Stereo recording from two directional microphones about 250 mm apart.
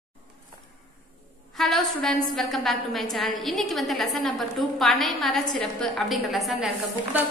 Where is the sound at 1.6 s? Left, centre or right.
Centre.